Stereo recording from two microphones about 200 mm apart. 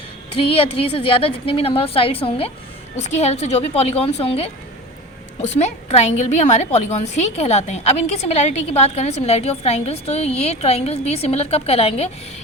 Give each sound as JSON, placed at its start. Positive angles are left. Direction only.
{"t": 0.3, "sound": "a woman's voice", "side_deg": 25}